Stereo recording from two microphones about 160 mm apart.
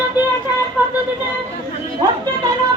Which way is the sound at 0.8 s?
10° right (ahead or behind).